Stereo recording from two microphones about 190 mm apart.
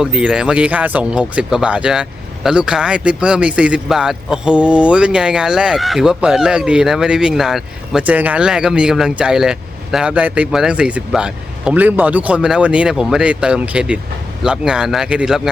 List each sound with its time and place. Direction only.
0.0 s speech: 5° right (ahead or behind)